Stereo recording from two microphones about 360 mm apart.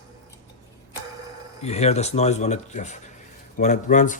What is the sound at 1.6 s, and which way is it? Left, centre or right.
Speech, centre.